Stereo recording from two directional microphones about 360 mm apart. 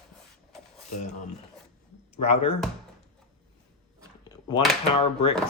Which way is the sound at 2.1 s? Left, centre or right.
Centre.